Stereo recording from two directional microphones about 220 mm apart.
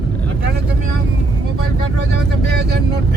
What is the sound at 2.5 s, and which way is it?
Speech, 45° right (ahead or behind).